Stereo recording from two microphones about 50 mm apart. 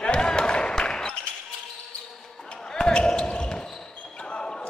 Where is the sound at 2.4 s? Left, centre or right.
Centre.